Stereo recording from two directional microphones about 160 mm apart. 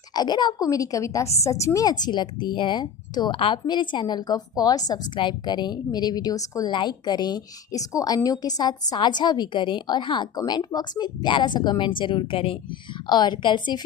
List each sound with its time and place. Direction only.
0.1 s speech: 25° left (ahead or behind)